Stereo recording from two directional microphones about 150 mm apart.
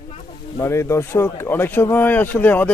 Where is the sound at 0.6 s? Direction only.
20° left (ahead or behind).